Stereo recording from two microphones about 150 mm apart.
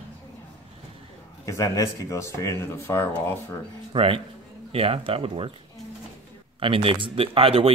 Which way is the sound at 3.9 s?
35° right (ahead or behind).